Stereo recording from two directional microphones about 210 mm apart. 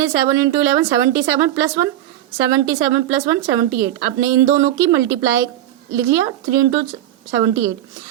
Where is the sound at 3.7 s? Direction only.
45° right (ahead or behind).